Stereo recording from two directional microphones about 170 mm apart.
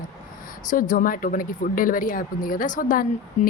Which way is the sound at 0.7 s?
50° left (ahead or behind).